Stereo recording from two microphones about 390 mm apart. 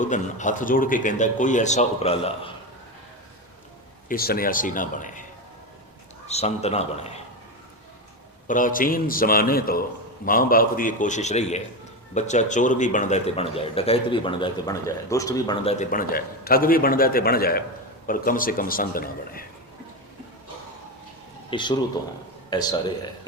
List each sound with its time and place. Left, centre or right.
0.0 s speech: centre
4.1 s speech: left
6.2 s a man's voice: centre
8.4 s speech: left
21.5 s a man's voice: centre